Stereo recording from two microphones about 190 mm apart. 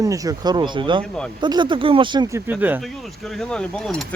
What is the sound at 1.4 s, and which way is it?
Speech, 25° right (ahead or behind).